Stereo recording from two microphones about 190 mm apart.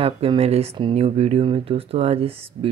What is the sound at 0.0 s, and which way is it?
Speech, 30° right (ahead or behind).